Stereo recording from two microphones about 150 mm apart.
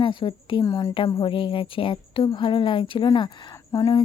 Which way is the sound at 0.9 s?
35° left (ahead or behind).